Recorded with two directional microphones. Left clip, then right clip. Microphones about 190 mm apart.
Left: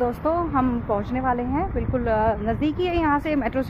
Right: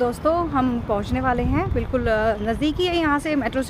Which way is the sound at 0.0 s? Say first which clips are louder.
Right 2 dB; 20° right (ahead or behind).